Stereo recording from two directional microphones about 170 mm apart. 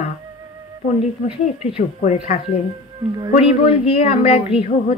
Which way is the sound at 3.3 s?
35° left (ahead or behind).